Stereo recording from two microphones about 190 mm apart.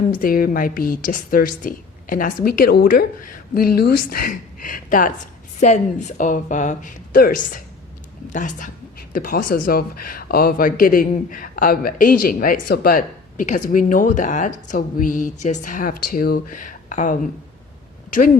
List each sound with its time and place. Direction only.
0.2 s a woman's voice: 50° left (ahead or behind)